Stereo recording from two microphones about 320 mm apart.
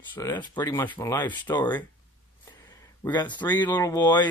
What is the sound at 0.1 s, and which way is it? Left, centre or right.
Speech, centre.